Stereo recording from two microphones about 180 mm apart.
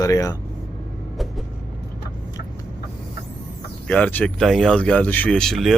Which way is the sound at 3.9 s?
10° left (ahead or behind).